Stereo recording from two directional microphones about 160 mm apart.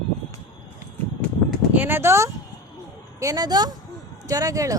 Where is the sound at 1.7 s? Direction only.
10° right (ahead or behind).